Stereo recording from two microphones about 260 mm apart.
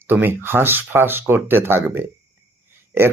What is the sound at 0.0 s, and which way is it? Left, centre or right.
Speech, centre.